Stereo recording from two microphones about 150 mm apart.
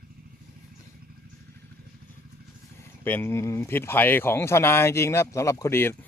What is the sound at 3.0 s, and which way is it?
A man's voice, 15° left (ahead or behind).